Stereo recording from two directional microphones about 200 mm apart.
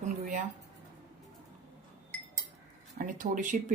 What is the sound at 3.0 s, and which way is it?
Speech, 40° right (ahead or behind).